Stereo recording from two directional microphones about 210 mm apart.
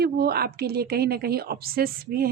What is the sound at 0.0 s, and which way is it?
A woman's voice, 50° right (ahead or behind).